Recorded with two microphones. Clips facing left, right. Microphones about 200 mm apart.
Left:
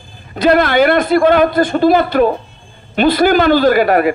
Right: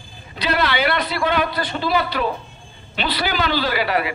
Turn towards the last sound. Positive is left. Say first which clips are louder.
# left 11 dB
turn(degrees=50)  # may be behind; listen again after turning